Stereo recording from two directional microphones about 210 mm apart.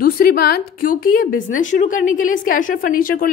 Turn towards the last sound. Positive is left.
turn(degrees=45)  # may be behind; listen again after turning